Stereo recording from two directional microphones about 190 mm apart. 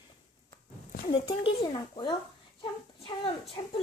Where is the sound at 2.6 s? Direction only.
30° left (ahead or behind).